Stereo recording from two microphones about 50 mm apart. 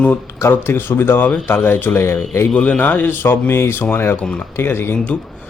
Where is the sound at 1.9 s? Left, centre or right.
Left.